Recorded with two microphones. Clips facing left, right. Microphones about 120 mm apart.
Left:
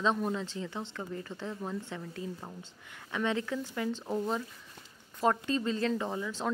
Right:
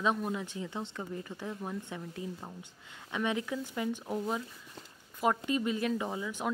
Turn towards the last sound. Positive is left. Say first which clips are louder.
# left 1 dB
turn(degrees=-15)  # may be behind; listen again after turning